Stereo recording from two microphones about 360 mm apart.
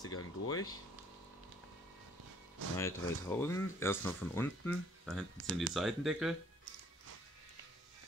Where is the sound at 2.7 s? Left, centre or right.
Centre.